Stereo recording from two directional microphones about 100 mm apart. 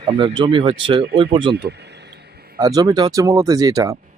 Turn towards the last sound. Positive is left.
turn(degrees=-35)  # may be behind; listen again after turning